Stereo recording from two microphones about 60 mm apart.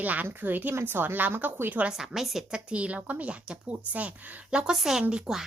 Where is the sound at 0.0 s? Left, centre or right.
Right.